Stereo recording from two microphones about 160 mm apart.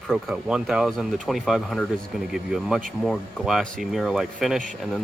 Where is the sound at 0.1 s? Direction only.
Centre (ahead or behind).